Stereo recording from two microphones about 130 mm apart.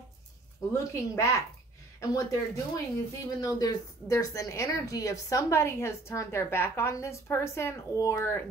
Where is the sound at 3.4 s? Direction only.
30° left (ahead or behind).